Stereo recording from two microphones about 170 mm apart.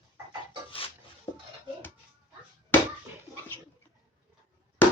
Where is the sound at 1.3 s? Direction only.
15° left (ahead or behind).